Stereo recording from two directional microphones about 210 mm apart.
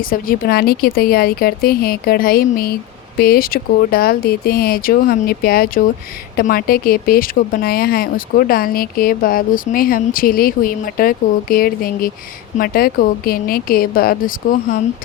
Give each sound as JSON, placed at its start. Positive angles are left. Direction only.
{"t": 0.0, "sound": "speech", "side_deg": 40}